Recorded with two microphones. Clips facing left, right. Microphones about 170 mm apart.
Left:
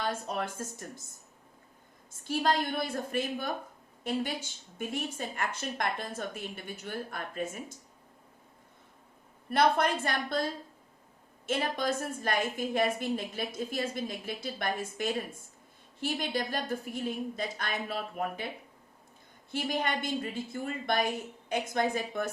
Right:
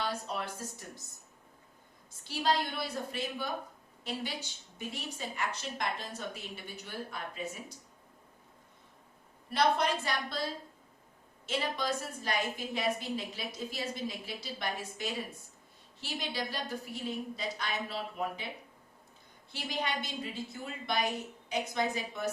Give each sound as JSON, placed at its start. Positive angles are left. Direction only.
{"t": 0.0, "sound": "a woman's voice", "side_deg": 50}
{"t": 2.2, "sound": "a woman's voice", "side_deg": 50}
{"t": 9.5, "sound": "a woman's voice", "side_deg": 55}
{"t": 11.4, "sound": "a woman's voice", "side_deg": 50}
{"t": 19.5, "sound": "a woman's voice", "side_deg": 50}